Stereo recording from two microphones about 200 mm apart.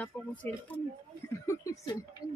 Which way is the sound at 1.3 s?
15° left (ahead or behind).